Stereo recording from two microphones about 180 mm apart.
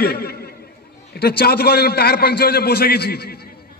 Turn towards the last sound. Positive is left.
turn(degrees=60)  # may be behind; listen again after turning